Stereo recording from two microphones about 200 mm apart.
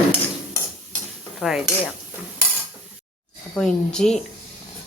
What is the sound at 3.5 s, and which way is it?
Speech, 5° left (ahead or behind).